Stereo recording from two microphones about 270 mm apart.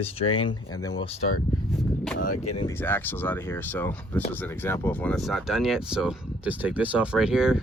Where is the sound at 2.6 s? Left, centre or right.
Centre.